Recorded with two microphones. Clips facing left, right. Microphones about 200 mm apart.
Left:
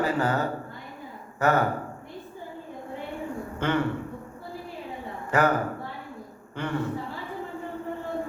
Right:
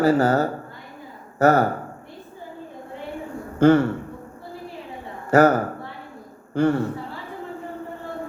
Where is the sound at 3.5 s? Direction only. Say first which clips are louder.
Right 11 dB; 40° right (ahead or behind).